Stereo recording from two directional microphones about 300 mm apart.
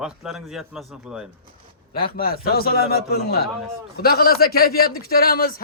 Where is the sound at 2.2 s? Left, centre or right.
Left.